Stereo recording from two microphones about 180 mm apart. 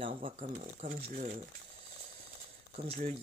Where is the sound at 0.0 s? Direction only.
40° right (ahead or behind).